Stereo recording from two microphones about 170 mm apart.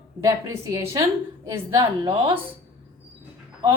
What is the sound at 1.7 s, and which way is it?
Speech, 30° right (ahead or behind).